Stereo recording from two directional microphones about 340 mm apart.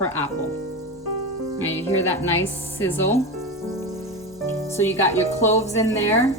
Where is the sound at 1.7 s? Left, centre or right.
Centre.